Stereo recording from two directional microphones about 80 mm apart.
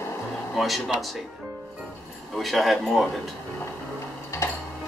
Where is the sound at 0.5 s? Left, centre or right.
Centre.